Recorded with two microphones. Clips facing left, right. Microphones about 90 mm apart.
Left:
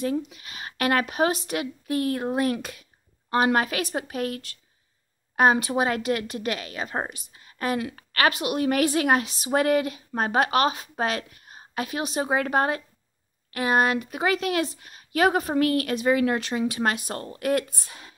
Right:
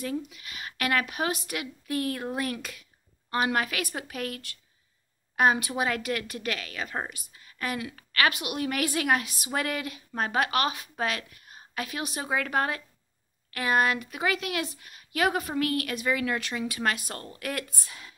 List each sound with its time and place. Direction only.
0.0 s a woman's voice: 30° left (ahead or behind)